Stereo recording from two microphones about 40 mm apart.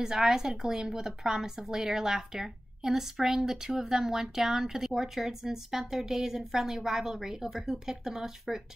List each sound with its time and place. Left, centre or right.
0.0 s a woman's voice: centre